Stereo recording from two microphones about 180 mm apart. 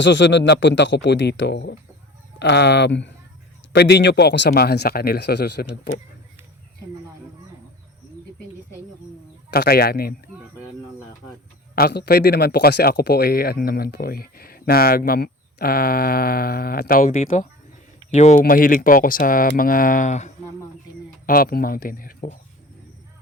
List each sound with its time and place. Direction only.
0.0 s a man's voice: 90° left; by 5.6 s 65° left (ahead or behind)
9.5 s speech: 60° left (ahead or behind)
11.7 s speech: 60° left (ahead or behind); by 18.3 s 40° left (ahead or behind)
18.4 s speech: 50° left (ahead or behind)
21.2 s speech: 55° left (ahead or behind)